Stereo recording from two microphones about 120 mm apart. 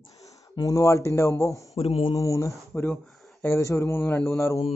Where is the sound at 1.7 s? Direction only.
60° left (ahead or behind).